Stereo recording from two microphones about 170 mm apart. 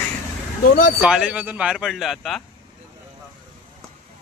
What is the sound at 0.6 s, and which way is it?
Speech, 55° left (ahead or behind).